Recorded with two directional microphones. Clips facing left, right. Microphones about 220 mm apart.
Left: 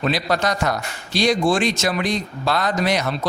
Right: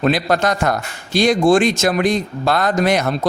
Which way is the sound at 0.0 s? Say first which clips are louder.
Right 4 dB; 50° right (ahead or behind).